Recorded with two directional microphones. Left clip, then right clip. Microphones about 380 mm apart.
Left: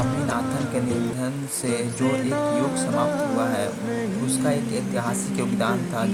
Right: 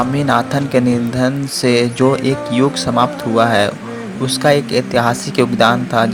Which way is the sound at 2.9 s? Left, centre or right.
Left.